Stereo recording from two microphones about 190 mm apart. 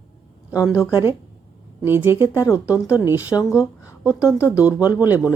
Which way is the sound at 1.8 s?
10° right (ahead or behind).